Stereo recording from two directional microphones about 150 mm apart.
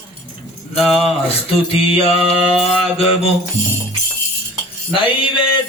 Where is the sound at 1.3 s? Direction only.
40° left (ahead or behind).